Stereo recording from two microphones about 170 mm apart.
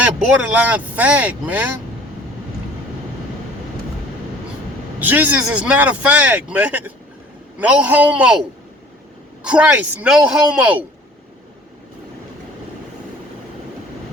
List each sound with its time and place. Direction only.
0.0 s speech: 10° right (ahead or behind)
4.9 s speech: 10° right (ahead or behind)